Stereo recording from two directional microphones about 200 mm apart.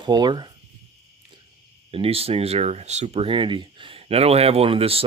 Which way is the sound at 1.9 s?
30° right (ahead or behind).